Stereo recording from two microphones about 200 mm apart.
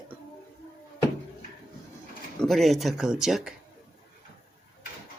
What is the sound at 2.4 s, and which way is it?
Speech, centre (ahead or behind).